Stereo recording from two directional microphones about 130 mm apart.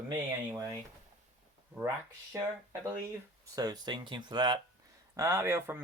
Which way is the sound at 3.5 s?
30° right (ahead or behind).